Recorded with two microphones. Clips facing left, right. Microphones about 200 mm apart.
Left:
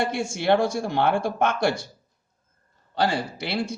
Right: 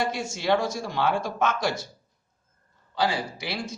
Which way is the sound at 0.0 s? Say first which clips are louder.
Left 3 dB; 60° left (ahead or behind).